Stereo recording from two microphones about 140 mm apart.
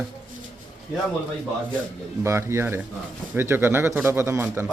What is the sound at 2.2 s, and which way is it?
Speech, 20° right (ahead or behind).